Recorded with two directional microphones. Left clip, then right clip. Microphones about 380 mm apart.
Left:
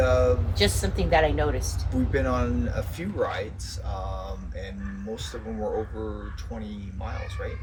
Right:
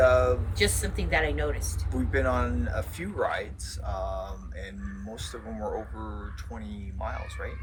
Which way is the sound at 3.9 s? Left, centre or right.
Centre.